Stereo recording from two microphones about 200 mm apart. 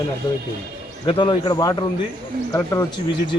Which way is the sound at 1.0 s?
25° left (ahead or behind).